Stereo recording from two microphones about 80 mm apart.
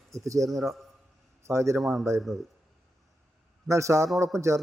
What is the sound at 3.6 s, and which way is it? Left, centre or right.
Speech, right.